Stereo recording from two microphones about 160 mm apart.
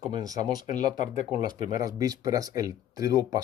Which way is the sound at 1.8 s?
20° right (ahead or behind).